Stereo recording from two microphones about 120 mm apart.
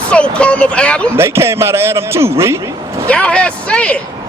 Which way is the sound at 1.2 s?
20° right (ahead or behind).